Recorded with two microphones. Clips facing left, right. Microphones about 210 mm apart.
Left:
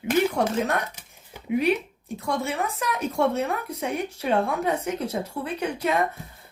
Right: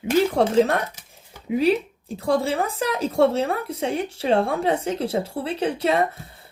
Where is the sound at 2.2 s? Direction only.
30° right (ahead or behind).